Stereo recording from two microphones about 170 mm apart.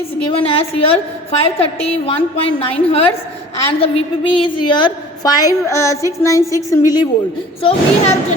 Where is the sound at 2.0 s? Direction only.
35° left (ahead or behind).